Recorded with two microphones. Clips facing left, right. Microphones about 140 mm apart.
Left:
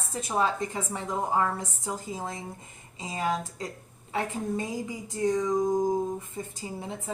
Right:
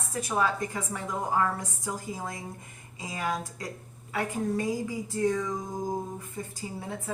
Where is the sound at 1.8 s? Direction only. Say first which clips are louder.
Even; 25° left (ahead or behind).